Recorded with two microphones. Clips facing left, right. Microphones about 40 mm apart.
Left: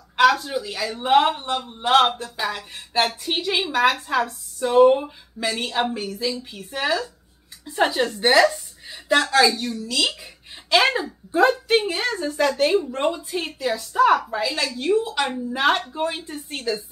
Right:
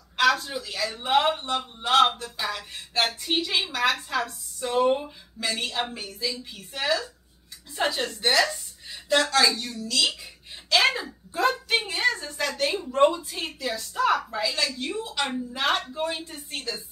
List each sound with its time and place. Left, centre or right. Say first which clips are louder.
0.2 s a woman's voice: left 5 dB; centre